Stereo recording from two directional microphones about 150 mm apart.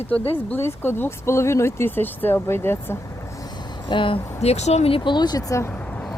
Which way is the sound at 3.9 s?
35° left (ahead or behind).